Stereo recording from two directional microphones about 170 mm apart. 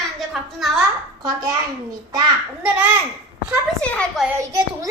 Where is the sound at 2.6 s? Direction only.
10° right (ahead or behind).